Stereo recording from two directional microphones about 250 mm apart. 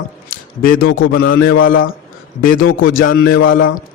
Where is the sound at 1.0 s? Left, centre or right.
Left.